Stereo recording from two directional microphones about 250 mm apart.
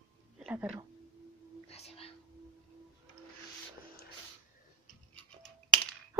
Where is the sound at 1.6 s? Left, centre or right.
Left.